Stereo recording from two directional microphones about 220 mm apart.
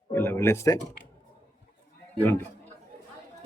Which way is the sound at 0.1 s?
10° left (ahead or behind).